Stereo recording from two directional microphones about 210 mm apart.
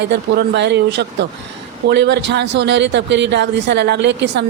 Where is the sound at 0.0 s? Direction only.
55° right (ahead or behind).